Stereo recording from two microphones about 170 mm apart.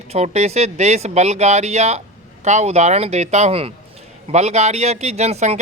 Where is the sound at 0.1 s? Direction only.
40° right (ahead or behind).